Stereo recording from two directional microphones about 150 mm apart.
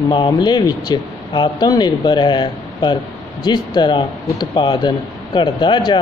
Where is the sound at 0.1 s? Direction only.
30° left (ahead or behind).